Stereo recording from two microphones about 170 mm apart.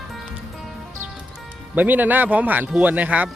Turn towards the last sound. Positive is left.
turn(degrees=-10)  # may be behind; listen again after turning